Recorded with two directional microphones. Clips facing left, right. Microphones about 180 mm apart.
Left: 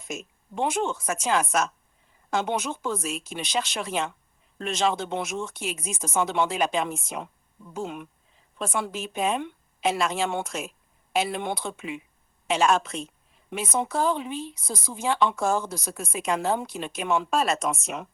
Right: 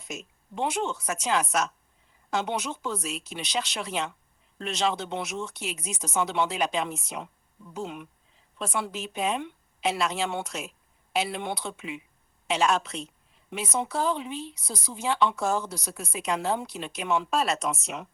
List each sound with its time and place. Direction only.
0.0 s speech: 50° left (ahead or behind)